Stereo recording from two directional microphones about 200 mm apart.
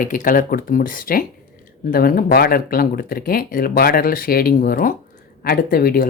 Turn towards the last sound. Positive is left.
turn(degrees=50)  # may be behind; listen again after turning